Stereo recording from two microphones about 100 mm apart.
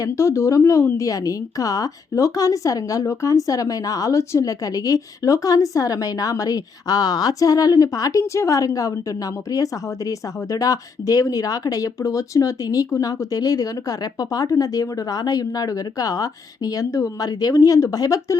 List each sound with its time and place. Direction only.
0.0 s a woman's voice: 30° left (ahead or behind)